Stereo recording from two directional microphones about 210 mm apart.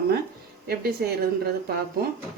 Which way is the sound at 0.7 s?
50° right (ahead or behind).